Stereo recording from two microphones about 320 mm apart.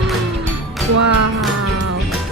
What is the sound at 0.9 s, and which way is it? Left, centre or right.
Music, right.